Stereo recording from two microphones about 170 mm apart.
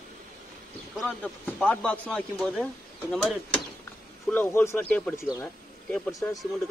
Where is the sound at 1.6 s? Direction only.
10° left (ahead or behind).